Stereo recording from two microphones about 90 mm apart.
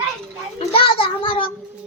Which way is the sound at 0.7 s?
85° left.